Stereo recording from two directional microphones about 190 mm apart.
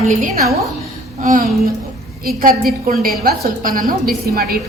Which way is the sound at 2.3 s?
50° right (ahead or behind).